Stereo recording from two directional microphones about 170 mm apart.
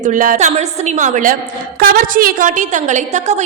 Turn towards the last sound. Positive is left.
turn(degrees=-45)  # may be behind; listen again after turning